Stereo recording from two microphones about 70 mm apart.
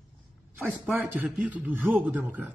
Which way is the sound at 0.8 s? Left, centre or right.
Right.